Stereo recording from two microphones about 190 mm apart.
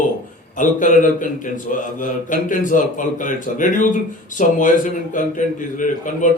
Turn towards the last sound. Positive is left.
turn(degrees=45)  # may be behind; listen again after turning